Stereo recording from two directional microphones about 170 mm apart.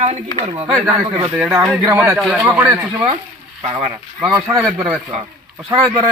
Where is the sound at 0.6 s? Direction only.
5° right (ahead or behind).